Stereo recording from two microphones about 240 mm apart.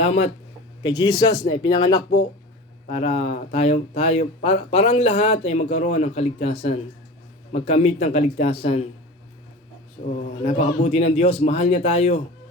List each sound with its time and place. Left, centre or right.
0.0 s speech: left
2.8 s speech: left
10.4 s speech: left